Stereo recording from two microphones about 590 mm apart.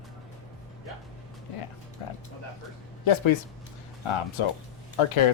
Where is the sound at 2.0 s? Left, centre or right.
Left.